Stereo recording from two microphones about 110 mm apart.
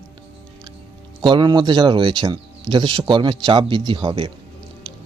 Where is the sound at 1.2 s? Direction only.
40° right (ahead or behind).